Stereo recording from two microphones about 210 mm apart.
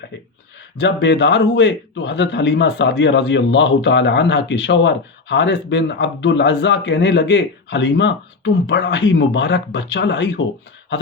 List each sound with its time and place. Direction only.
0.8 s a man's voice: 55° left (ahead or behind)